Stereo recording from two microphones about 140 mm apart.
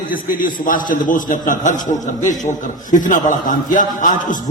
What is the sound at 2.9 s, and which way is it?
A man's voice, 70° left (ahead or behind).